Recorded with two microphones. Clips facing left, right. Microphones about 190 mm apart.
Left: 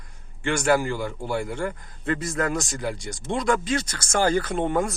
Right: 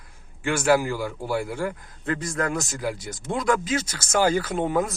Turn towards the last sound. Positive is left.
turn(degrees=-5)  # may be behind; listen again after turning